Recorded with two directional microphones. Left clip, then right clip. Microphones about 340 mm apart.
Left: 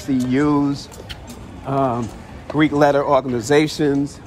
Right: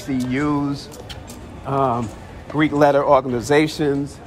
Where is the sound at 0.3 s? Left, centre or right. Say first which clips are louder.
Left 4 dB; centre.